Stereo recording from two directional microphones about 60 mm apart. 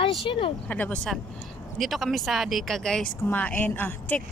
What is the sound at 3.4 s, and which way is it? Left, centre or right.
Speech, left.